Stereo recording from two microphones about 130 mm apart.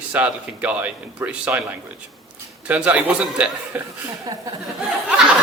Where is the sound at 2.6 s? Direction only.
10° right (ahead or behind).